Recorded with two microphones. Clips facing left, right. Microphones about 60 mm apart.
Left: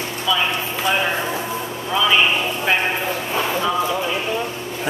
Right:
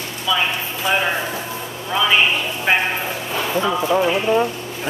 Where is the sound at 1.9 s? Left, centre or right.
Centre.